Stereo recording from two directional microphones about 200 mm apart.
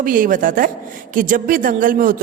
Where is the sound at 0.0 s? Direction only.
45° right (ahead or behind).